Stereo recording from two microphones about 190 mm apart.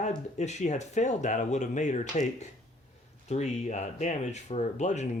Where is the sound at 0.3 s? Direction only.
35° left (ahead or behind).